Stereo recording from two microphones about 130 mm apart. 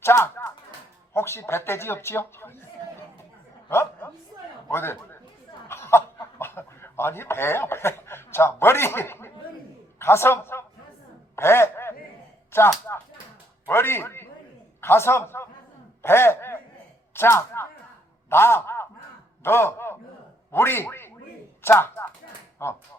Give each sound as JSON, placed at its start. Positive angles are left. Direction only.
{"t": 0.0, "sound": "a sound", "side_deg": 20}
{"t": 1.1, "sound": "speech", "side_deg": 20}
{"t": 3.7, "sound": "chuckle", "side_deg": 20}
{"t": 4.7, "sound": "a man's voice", "side_deg": 20}
{"t": 5.6, "sound": "snicker", "side_deg": 20}
{"t": 6.4, "sound": "a man's voice", "side_deg": 15}
{"t": 11.3, "sound": "a sound", "side_deg": 20}
{"t": 12.5, "sound": "a man's voice", "side_deg": 20}